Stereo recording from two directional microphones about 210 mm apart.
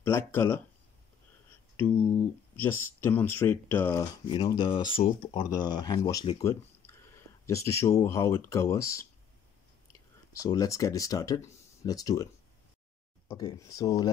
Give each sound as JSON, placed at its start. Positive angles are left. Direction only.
{"t": 0.0, "sound": "speech", "side_deg": 10}
{"t": 1.8, "sound": "speech", "side_deg": 10}
{"t": 4.3, "sound": "speech", "side_deg": 25}
{"t": 10.4, "sound": "speech", "side_deg": 15}
{"t": 13.3, "sound": "speech", "side_deg": 20}